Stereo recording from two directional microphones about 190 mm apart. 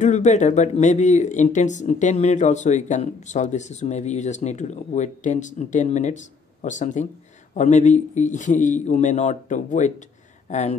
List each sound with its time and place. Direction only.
0.0 s speech: 40° left (ahead or behind)